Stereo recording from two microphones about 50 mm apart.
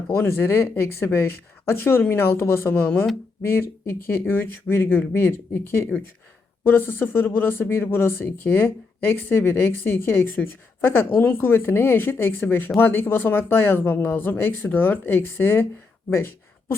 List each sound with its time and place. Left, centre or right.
0.2 s speech: left
6.7 s speech: left